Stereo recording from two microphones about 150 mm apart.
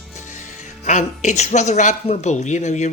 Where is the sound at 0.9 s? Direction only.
55° left (ahead or behind).